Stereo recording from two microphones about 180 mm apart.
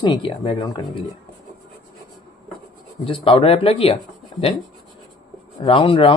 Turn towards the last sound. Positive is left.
turn(degrees=30)  # may be behind; listen again after turning